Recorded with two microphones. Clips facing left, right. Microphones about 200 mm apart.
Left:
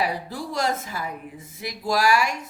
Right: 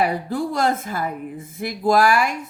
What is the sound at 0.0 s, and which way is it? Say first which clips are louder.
A woman's voice: right 6 dB; 55° right (ahead or behind).